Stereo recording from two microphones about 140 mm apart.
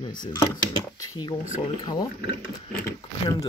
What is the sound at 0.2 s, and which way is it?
Speech, 25° left (ahead or behind).